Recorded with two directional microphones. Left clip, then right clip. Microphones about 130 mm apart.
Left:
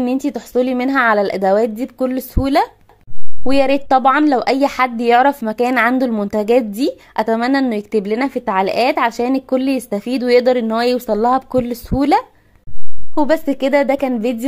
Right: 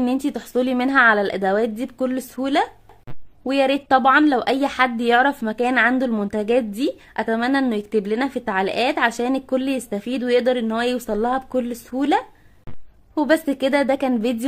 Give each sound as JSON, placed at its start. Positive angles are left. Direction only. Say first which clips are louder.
{"t": 0.0, "sound": "a woman's voice", "louder": "left 3 dB", "side_deg": 20}
{"t": 13.1, "sound": "a woman's voice", "louder": "left 3 dB", "side_deg": 20}